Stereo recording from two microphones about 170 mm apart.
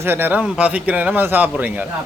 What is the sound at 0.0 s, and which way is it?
Speech, 10° right (ahead or behind).